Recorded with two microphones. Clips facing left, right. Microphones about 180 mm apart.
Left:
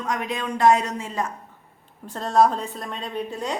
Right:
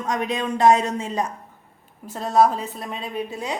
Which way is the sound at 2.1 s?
5° right (ahead or behind).